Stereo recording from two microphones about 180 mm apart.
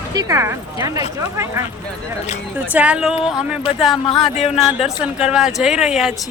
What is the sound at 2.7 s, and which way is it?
Speech, 5° right (ahead or behind).